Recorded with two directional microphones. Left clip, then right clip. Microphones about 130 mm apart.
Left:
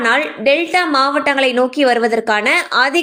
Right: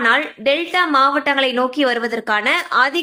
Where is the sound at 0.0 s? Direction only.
30° left (ahead or behind).